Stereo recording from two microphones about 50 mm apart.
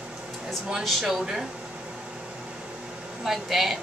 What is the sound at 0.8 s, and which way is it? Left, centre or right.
Speech, centre.